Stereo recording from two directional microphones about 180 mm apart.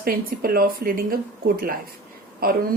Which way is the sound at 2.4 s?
55° right (ahead or behind).